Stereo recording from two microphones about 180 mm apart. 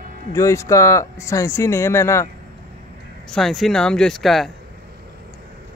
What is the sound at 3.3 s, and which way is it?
Speech, centre (ahead or behind).